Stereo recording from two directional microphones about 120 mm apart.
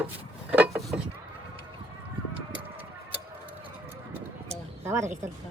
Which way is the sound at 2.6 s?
15° right (ahead or behind).